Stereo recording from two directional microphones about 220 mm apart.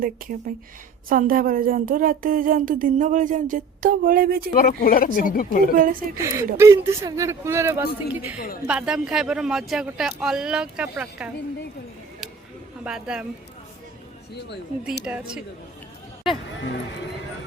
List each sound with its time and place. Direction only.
0.0 s speech: 40° right (ahead or behind)
4.5 s speech: 40° left (ahead or behind)
5.7 s speech: 40° right (ahead or behind)
6.1 s a man's voice: 15° right (ahead or behind)
12.8 s speech: 5° right (ahead or behind)
14.3 s speech: 50° left (ahead or behind)
15.0 s a man's voice: 5° right (ahead or behind)